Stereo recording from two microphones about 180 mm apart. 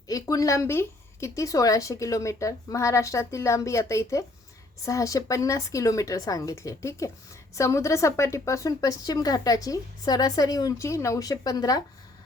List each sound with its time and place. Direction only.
0.1 s a woman's voice: 20° left (ahead or behind)